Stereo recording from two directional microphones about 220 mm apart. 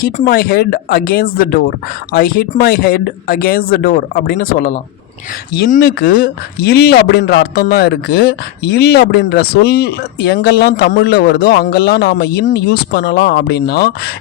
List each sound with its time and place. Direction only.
0.0 s speech: 45° left (ahead or behind)